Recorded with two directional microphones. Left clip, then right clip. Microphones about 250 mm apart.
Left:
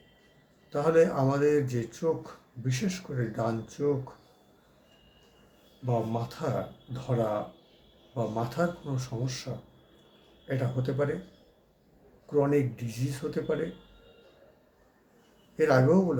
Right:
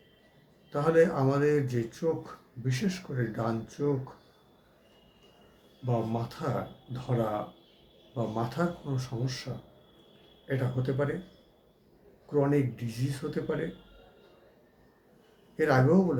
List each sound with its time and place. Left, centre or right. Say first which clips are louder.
0.7 s speech: left 1 dB; centre
5.8 s speech: left 1 dB; centre
10.5 s speech: even; centre
12.3 s speech: left 1 dB; centre
15.5 s speech: left 2 dB; centre